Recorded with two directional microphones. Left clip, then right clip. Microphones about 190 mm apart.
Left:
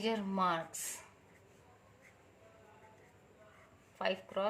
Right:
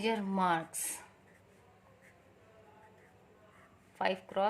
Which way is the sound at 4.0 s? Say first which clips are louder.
Right 3 dB; 45° right (ahead or behind).